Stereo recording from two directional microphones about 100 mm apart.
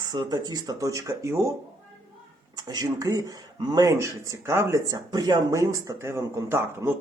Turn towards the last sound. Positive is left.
turn(degrees=-25)  # may be behind; listen again after turning